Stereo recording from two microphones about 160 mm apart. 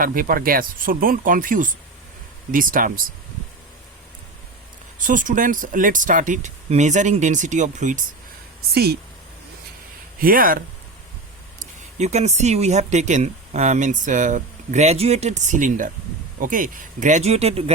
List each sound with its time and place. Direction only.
0.0 s speech: 60° right (ahead or behind)
4.9 s speech: 55° right (ahead or behind)
8.7 s speech: 80° right
10.2 s speech: 65° right (ahead or behind)
11.6 s speech: 45° right (ahead or behind)